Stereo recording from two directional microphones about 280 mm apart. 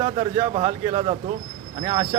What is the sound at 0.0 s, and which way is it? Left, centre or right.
A man's voice, right.